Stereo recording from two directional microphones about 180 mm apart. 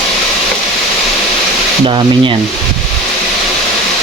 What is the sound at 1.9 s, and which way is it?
Speech, 25° right (ahead or behind).